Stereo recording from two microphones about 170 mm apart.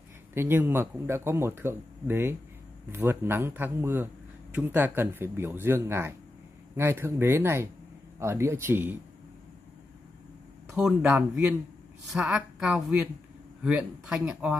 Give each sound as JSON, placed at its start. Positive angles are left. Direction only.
{"t": 0.3, "sound": "speech", "side_deg": -15}
{"t": 10.7, "sound": "a woman's voice", "side_deg": -5}